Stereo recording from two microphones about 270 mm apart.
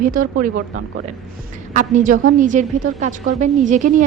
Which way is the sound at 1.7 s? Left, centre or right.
Right.